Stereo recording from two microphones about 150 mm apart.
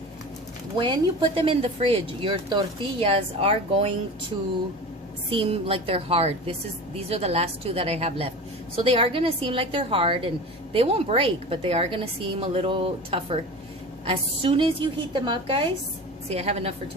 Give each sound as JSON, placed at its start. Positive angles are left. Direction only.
{"t": 1.4, "sound": "a woman's voice", "side_deg": -35}
{"t": 5.3, "sound": "a woman's voice", "side_deg": -40}
{"t": 16.3, "sound": "a woman's voice", "side_deg": -45}